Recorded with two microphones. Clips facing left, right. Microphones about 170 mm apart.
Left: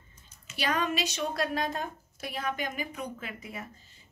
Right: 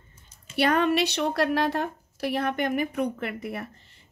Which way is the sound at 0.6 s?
60° right (ahead or behind).